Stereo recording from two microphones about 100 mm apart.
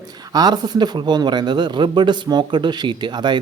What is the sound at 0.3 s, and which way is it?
A man's voice, 45° right (ahead or behind).